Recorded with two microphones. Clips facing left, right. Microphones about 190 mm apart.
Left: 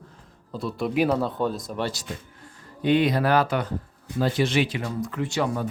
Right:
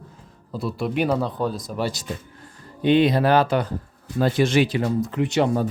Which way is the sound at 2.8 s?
25° right (ahead or behind).